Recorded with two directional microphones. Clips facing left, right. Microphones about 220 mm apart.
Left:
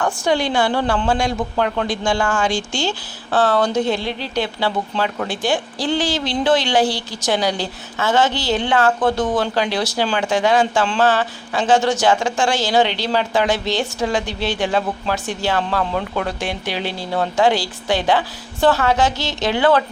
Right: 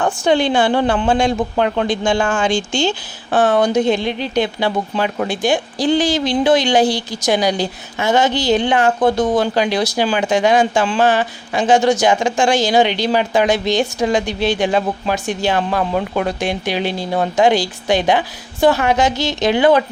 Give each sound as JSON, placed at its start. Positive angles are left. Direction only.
{"t": 0.0, "sound": "speech", "side_deg": -25}